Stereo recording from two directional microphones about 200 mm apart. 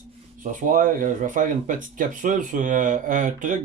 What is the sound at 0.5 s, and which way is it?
Speech, 40° right (ahead or behind).